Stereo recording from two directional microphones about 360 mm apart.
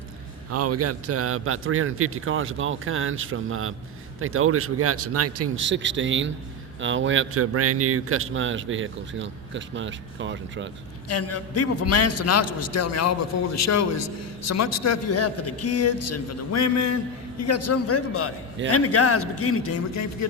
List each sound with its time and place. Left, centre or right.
0.5 s a man's voice: right
11.1 s a man's voice: left